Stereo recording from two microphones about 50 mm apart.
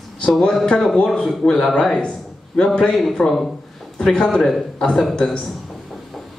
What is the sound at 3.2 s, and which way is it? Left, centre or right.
Speech, left.